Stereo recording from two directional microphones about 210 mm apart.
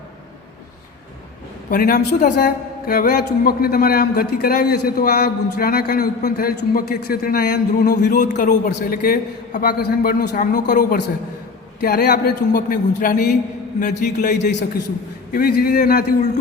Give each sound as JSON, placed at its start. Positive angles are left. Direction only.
{"t": 1.7, "sound": "a man's voice", "side_deg": 40}
{"t": 8.1, "sound": "a man's voice", "side_deg": 35}